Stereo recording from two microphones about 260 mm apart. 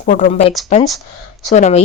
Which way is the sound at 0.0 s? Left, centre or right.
Left.